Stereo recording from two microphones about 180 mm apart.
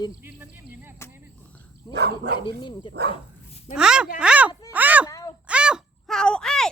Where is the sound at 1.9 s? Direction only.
65° right (ahead or behind).